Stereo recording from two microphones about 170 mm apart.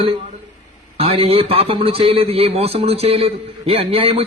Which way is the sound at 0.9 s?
35° right (ahead or behind).